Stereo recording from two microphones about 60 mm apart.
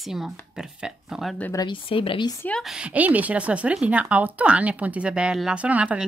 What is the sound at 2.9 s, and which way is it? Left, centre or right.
Speech, right.